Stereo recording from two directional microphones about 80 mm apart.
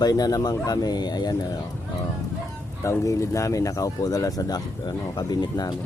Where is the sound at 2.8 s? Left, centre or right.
Left.